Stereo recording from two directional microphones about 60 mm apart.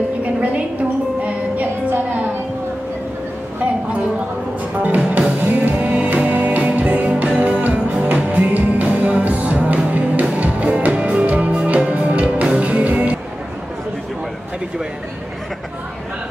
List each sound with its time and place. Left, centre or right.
0.2 s music: right
4.7 s music: right